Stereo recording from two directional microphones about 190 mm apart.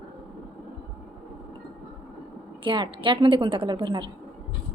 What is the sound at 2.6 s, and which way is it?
A woman's voice, 25° right (ahead or behind).